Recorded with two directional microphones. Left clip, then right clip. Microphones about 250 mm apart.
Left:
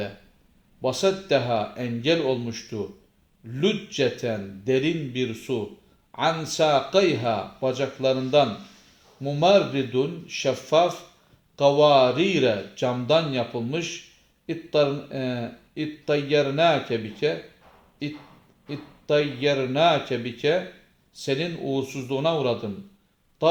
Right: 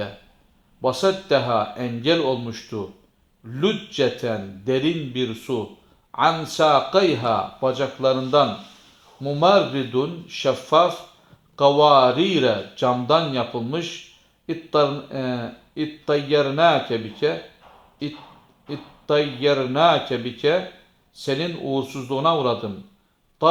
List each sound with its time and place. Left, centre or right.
0.8 s speech: centre
18.7 s a man's voice: centre